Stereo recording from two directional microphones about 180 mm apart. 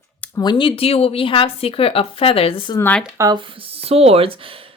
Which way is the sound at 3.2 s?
20° right (ahead or behind).